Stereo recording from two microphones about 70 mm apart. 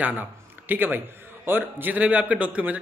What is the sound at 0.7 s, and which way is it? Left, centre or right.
A man's voice, right.